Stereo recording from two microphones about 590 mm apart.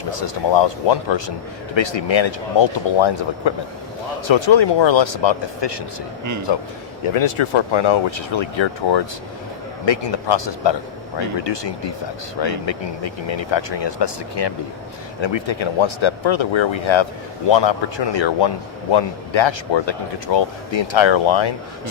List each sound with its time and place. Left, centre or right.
0.2 s a man's voice: left
7.0 s a man's voice: left